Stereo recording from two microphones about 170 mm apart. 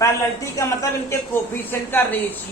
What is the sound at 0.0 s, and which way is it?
Speech, 15° left (ahead or behind).